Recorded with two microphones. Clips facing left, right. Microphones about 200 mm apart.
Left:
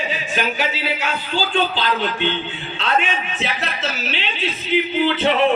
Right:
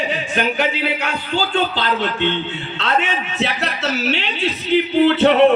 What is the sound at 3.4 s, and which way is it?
Speech, 70° right (ahead or behind).